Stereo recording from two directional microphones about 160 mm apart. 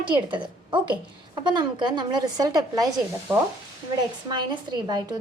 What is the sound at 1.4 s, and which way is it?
A woman's voice, 30° right (ahead or behind).